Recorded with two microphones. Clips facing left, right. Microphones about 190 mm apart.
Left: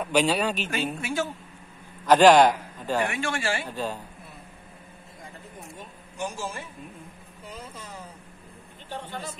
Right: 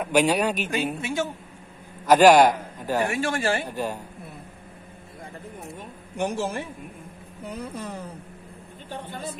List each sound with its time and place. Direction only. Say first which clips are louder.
0.0 s a man's voice: right 2 dB; 10° right (ahead or behind)
3.1 s speech: right 4 dB; 40° right (ahead or behind)
3.6 s a man's voice: right 2 dB; 15° right (ahead or behind)
6.1 s a man's voice: right 6 dB; 65° right (ahead or behind)
7.4 s a sound: right 8 dB; 60° right (ahead or behind)